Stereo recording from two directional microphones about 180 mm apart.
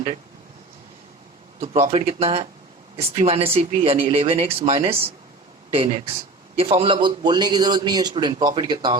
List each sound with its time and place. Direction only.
1.6 s a man's voice: 40° right (ahead or behind)